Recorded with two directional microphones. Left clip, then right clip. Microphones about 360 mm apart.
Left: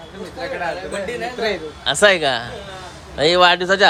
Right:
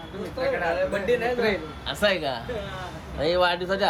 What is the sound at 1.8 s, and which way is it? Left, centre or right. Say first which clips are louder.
A man's voice: left 10 dB; left.